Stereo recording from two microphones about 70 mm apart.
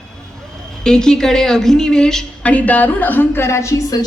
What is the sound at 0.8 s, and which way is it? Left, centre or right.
A woman's voice, centre.